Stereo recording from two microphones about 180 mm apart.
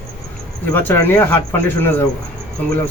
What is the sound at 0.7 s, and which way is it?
A man's voice, 10° left (ahead or behind).